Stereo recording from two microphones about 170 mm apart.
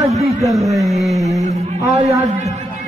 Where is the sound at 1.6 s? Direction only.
40° right (ahead or behind).